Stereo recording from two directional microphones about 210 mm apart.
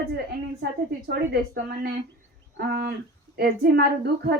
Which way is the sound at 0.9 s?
50° right (ahead or behind).